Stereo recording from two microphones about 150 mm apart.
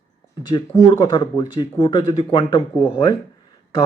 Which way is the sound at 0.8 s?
30° left (ahead or behind).